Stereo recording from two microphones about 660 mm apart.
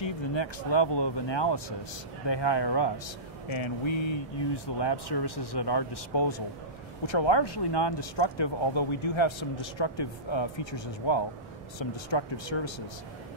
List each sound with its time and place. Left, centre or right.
0.0 s speech: left